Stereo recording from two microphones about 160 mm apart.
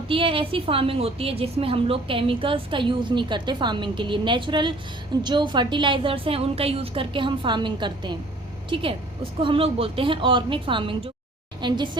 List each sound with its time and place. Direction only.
0.1 s a woman's voice: 35° right (ahead or behind)